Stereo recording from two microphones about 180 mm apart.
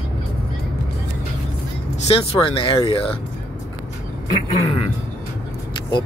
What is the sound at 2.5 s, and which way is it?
Speech, 30° left (ahead or behind).